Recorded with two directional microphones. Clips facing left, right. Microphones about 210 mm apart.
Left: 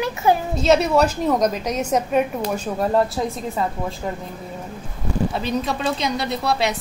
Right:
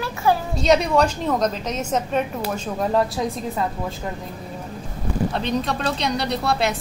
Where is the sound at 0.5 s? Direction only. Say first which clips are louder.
Even; 5° left (ahead or behind).